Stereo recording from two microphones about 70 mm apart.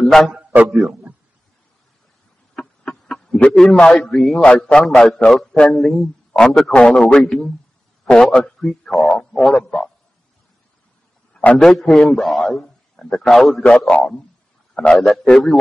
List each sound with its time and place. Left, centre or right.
0.0 s a sound: centre
0.3 s a man's voice: centre
0.7 s a man's voice: centre
2.5 s a sound: centre
3.7 s a man's voice: centre
11.3 s a man's voice: centre
13.6 s a man's voice: centre